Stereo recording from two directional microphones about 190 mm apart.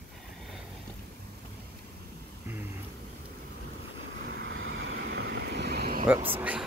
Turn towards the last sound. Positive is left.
turn(degrees=-5)  # may be behind; listen again after turning